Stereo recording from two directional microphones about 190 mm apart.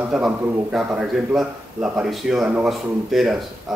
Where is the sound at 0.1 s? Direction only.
5° right (ahead or behind).